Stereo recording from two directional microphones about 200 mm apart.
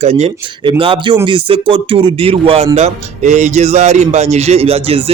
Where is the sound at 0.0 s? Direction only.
30° right (ahead or behind).